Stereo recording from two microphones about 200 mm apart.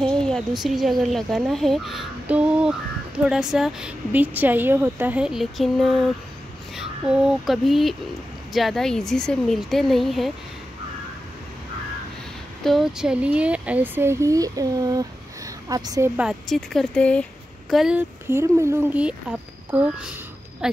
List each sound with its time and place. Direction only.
0.0 s a sound: 5° left (ahead or behind)
0.6 s a woman's voice: centre (ahead or behind)
12.6 s speech: centre (ahead or behind); by 16.1 s 20° right (ahead or behind)
16.2 s a woman's voice: centre (ahead or behind)